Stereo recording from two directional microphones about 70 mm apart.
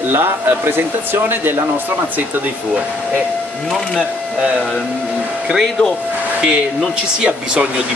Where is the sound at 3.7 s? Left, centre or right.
Centre.